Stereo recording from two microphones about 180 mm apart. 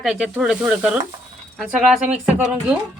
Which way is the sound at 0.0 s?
5° right (ahead or behind).